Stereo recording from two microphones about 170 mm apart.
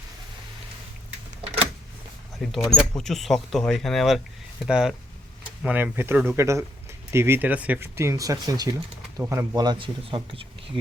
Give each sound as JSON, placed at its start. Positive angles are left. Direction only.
{"t": 2.4, "sound": "speech", "side_deg": 0}